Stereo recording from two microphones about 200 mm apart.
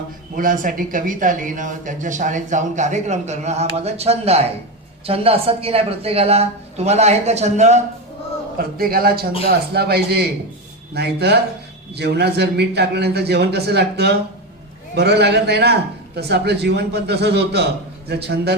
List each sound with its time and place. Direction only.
0.3 s speech: 40° right (ahead or behind)
8.5 s a man's voice: 50° right (ahead or behind)